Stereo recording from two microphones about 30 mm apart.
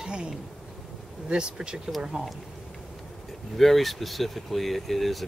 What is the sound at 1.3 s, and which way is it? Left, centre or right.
Speech, right.